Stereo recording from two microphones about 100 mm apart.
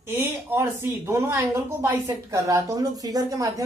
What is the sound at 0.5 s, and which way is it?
A woman's voice, 25° right (ahead or behind).